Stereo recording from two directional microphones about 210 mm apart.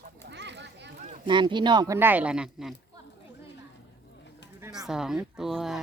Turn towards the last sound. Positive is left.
turn(degrees=0)  # may be behind; listen again after turning